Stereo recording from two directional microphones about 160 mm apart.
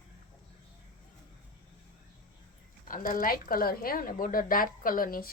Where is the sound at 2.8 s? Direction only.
60° left (ahead or behind).